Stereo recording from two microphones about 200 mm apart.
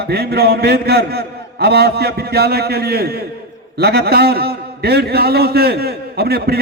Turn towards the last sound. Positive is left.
turn(degrees=-50)  # may be behind; listen again after turning